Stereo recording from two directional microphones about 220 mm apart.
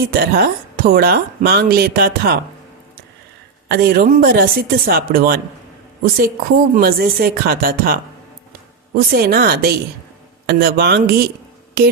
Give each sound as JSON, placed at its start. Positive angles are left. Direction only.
{"t": 0.1, "sound": "speech", "side_deg": -45}
{"t": 3.7, "sound": "a woman's voice", "side_deg": -45}